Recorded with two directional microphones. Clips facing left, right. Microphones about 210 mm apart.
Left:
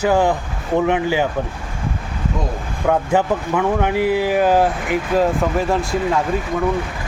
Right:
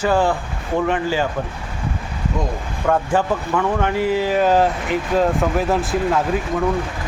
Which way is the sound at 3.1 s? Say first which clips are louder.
Left 2 dB; 15° left (ahead or behind).